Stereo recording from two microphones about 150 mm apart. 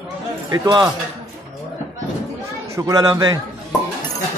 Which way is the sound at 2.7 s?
25° right (ahead or behind).